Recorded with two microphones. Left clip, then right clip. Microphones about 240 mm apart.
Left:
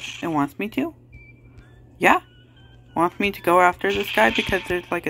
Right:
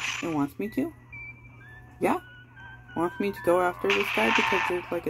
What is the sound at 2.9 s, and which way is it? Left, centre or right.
Speech, centre.